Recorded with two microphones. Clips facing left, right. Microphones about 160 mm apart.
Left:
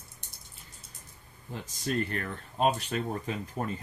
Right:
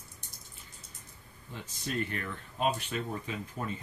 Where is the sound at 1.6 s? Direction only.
40° left (ahead or behind).